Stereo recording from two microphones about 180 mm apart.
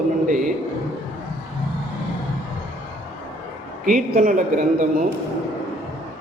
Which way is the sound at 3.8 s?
45° right (ahead or behind).